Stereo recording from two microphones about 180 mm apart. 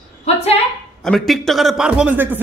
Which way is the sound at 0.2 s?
35° left (ahead or behind).